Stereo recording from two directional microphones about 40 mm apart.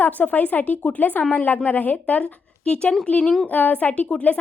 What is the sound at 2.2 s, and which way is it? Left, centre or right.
Speech, left.